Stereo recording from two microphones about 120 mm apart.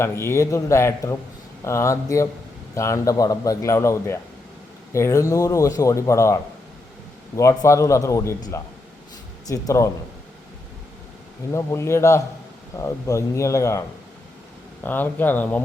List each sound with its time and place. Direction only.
0.0 s speech: 20° left (ahead or behind)
11.5 s speech: 25° left (ahead or behind)
14.8 s speech: 15° left (ahead or behind)